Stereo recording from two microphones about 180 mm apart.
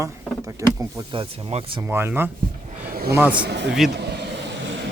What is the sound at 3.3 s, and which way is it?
Speech, 60° right (ahead or behind).